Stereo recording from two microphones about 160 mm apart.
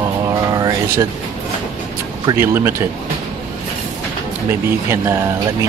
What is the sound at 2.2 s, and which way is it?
Speech, 15° right (ahead or behind).